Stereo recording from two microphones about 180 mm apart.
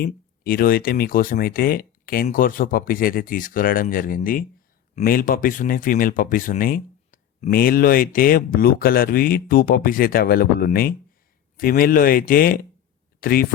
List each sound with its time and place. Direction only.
0.0 s speech: 55° left (ahead or behind)